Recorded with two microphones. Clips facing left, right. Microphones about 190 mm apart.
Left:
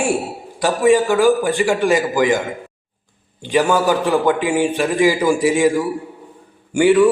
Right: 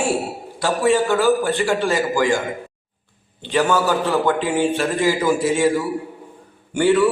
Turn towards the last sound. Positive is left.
turn(degrees=10)  # may be behind; listen again after turning